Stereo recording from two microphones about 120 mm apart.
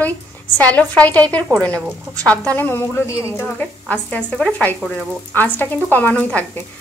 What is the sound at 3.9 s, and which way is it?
A woman's voice, 10° left (ahead or behind).